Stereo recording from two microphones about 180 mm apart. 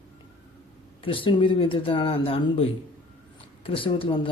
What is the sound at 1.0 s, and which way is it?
Speech, 30° left (ahead or behind).